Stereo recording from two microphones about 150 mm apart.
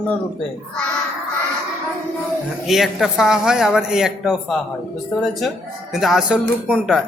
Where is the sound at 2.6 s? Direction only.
Centre (ahead or behind).